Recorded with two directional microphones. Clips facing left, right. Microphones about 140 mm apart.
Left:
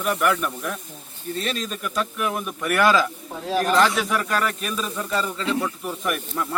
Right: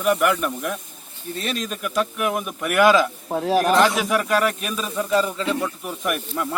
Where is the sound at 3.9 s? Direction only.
10° right (ahead or behind).